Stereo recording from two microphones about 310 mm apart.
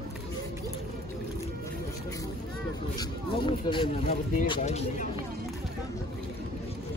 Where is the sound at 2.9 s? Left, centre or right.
Centre.